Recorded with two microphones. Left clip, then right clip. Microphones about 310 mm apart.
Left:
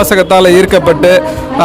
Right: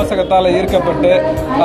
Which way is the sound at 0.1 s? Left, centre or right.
Left.